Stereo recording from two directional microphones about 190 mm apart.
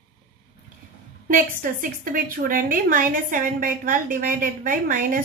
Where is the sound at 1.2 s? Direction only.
45° right (ahead or behind).